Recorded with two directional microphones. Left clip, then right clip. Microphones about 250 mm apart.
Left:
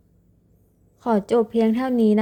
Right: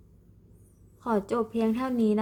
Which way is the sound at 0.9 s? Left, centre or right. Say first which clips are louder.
Left 8 dB; left.